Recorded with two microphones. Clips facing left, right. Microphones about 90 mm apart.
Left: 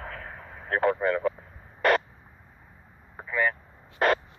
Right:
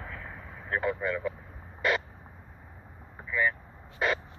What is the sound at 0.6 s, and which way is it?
Speech, 55° left (ahead or behind).